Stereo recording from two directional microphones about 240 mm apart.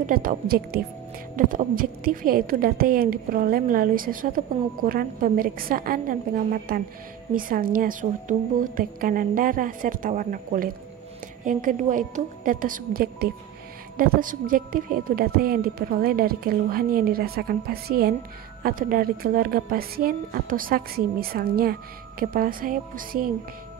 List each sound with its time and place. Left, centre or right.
0.0 s a woman's voice: right